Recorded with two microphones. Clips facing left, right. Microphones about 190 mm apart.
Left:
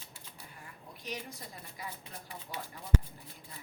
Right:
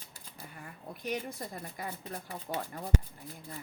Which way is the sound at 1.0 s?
55° right (ahead or behind).